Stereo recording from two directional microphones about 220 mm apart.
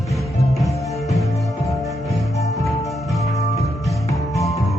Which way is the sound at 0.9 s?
Centre (ahead or behind).